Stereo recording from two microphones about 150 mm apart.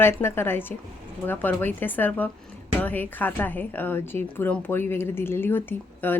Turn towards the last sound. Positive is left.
turn(degrees=15)  # may be behind; listen again after turning